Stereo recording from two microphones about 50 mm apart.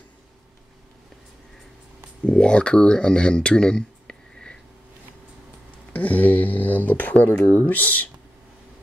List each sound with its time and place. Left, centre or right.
2.2 s speech: left
5.9 s speech: left
7.2 s speech: left